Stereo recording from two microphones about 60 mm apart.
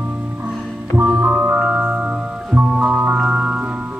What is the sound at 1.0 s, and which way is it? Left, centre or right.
Music, right.